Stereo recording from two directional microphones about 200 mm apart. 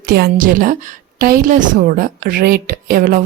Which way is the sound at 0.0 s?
50° right (ahead or behind).